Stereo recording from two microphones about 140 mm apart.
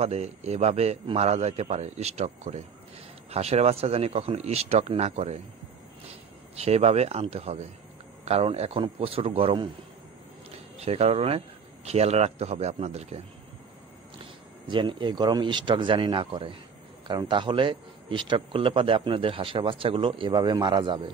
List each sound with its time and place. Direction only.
0.0 s a man's voice: 50° right (ahead or behind)
6.5 s a man's voice: 50° right (ahead or behind)
10.8 s a man's voice: 45° right (ahead or behind)
14.7 s speech: 35° right (ahead or behind)